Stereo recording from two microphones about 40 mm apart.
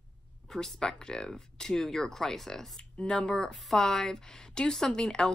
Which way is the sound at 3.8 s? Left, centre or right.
Centre.